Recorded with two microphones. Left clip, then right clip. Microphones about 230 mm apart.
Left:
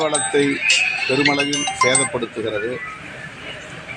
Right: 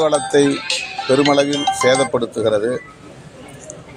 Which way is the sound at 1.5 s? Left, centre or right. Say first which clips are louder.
Right 3 dB; right.